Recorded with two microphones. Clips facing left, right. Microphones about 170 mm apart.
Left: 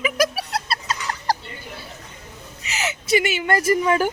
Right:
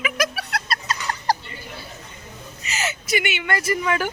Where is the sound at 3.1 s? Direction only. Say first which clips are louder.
Left 5 dB; 35° left (ahead or behind).